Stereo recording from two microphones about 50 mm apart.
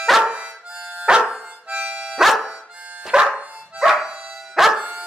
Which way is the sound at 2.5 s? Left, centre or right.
Right.